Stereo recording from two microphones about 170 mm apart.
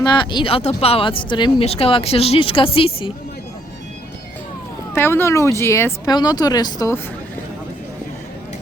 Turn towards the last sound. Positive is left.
turn(degrees=20)  # may be behind; listen again after turning